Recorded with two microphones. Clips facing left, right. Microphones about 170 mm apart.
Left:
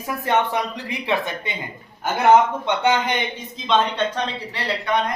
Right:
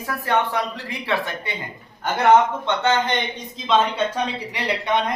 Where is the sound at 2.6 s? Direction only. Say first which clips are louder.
Left 1 dB; 15° left (ahead or behind).